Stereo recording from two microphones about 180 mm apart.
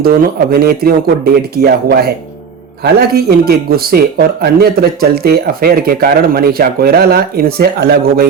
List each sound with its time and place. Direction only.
0.0 s speech: 55° right (ahead or behind)